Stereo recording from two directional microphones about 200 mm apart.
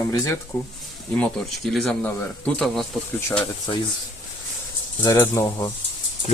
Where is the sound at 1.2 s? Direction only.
5° left (ahead or behind).